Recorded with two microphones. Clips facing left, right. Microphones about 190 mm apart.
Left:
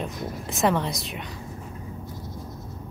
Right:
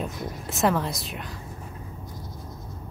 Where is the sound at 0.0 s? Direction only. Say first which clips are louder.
Left 1 dB; 5° right (ahead or behind).